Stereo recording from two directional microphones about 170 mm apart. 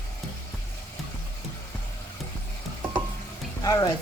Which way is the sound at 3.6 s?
20° left (ahead or behind).